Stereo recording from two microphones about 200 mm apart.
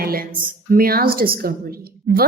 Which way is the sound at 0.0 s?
45° right (ahead or behind).